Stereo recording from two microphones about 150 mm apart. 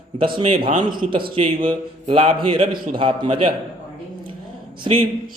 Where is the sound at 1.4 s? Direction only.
35° right (ahead or behind).